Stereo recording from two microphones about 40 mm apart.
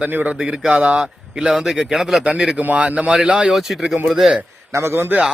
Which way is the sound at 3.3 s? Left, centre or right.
Right.